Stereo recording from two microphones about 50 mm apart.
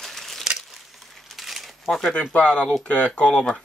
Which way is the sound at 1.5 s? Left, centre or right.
Centre.